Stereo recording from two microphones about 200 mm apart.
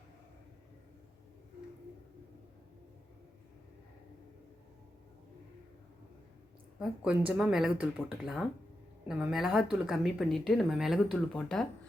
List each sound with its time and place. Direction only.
6.7 s speech: 5° right (ahead or behind)